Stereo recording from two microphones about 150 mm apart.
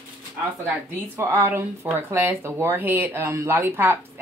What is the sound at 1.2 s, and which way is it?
Speech, 15° right (ahead or behind).